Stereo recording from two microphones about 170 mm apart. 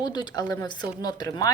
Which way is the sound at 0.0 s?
25° left (ahead or behind).